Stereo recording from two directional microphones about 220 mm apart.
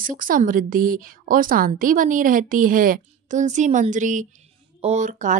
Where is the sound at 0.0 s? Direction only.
40° right (ahead or behind).